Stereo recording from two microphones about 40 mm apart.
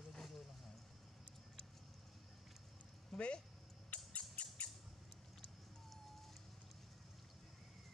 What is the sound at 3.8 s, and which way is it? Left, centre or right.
Squawk, left.